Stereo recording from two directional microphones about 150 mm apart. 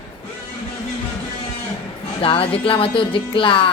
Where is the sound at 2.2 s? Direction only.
40° left (ahead or behind).